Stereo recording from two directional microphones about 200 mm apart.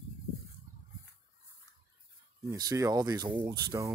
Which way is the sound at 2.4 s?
15° right (ahead or behind).